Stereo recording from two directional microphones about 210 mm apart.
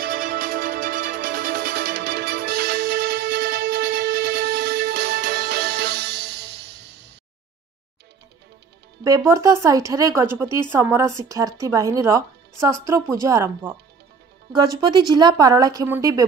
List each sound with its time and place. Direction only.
0.0 s music: 45° right (ahead or behind)
9.0 s speech: 15° right (ahead or behind)